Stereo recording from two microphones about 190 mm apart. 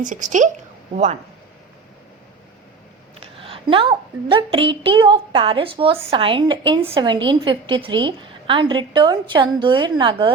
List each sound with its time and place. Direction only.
0.0 s a woman's voice: 40° right (ahead or behind)
3.2 s a woman's voice: 30° right (ahead or behind)